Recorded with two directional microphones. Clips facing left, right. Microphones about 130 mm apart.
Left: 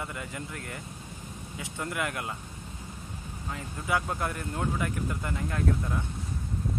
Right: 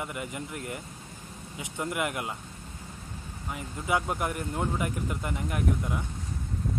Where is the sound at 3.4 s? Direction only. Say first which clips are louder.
Right 2 dB; 20° right (ahead or behind).